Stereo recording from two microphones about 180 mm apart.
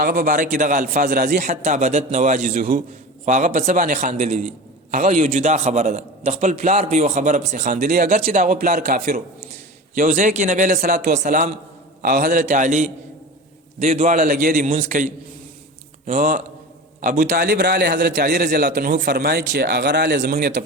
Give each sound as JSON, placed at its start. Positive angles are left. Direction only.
{"t": 0.0, "sound": "a man's voice", "side_deg": -50}
{"t": 1.5, "sound": "a man's voice", "side_deg": -40}